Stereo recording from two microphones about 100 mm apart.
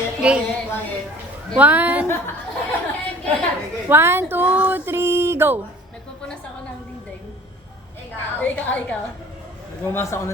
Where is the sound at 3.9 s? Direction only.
25° right (ahead or behind).